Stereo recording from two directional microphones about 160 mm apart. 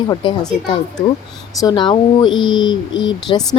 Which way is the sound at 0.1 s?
30° left (ahead or behind).